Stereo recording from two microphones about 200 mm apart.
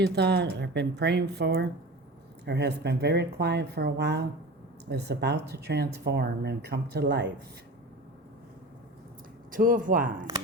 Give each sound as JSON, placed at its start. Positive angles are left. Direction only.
{"t": 0.0, "sound": "speech", "side_deg": -55}
{"t": 9.5, "sound": "speech", "side_deg": -40}